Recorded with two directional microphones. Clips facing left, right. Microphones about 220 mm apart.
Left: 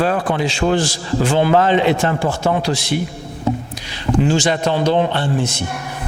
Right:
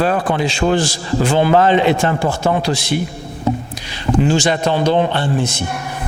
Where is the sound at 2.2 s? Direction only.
30° right (ahead or behind).